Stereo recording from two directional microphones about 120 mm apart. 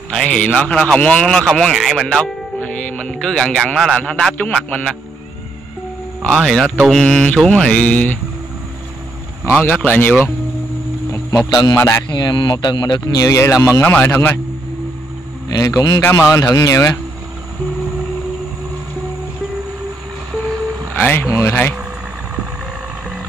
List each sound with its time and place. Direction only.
0.1 s mantra: 5° left (ahead or behind)
0.8 s speech: 10° left (ahead or behind)
6.2 s mantra: 5° left (ahead or behind)
9.5 s mantra: 10° left (ahead or behind)
11.5 s speech: 30° left (ahead or behind)
12.1 s speech: 40° left (ahead or behind)
13.8 s mantra: 15° left (ahead or behind)
15.4 s speech: 30° left (ahead or behind)
21.0 s speech: 20° left (ahead or behind)